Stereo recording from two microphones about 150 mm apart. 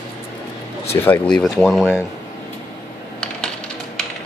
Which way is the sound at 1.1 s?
5° left (ahead or behind).